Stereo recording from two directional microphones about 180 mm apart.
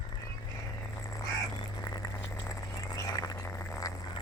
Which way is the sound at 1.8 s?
20° left (ahead or behind).